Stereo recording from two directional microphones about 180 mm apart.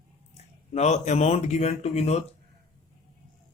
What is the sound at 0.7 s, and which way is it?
Speech, 40° left (ahead or behind).